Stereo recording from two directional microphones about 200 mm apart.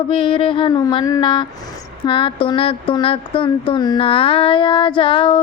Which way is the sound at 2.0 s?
25° left (ahead or behind).